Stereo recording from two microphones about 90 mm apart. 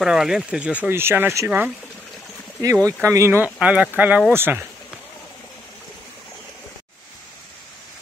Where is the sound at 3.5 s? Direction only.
15° right (ahead or behind).